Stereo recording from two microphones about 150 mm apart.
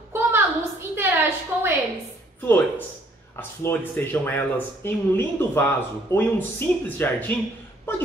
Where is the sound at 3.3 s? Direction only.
15° left (ahead or behind).